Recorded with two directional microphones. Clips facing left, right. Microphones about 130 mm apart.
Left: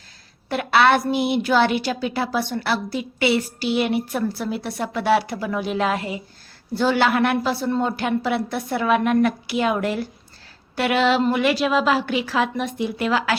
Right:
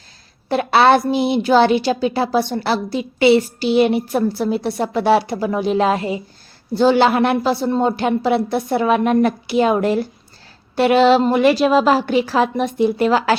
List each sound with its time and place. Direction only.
0.4 s a woman's voice: 30° right (ahead or behind)